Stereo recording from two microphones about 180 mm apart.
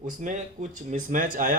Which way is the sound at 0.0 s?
45° right (ahead or behind).